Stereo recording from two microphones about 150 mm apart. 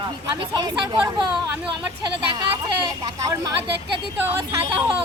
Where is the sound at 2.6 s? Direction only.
25° right (ahead or behind).